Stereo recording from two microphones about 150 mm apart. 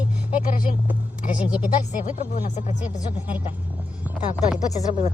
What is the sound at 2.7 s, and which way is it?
Speech, 10° right (ahead or behind).